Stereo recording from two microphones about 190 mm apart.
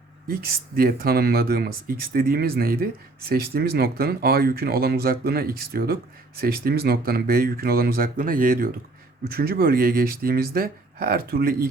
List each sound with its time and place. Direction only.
0.8 s speech: 50° right (ahead or behind)